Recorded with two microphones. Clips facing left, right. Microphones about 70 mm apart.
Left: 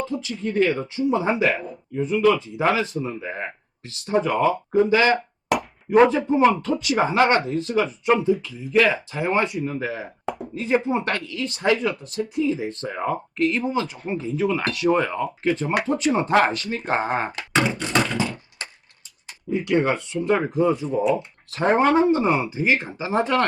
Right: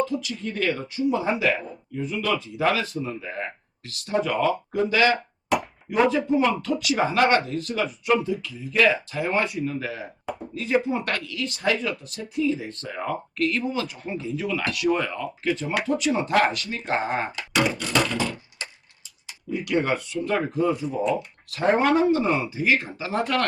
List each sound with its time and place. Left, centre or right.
0.0 s speech: left
5.9 s speech: left
15.4 s speech: left
19.5 s speech: left